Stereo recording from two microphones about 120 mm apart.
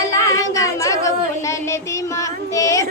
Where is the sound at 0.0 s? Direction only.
25° left (ahead or behind).